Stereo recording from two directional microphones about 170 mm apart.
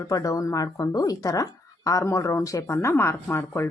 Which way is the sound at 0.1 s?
20° left (ahead or behind).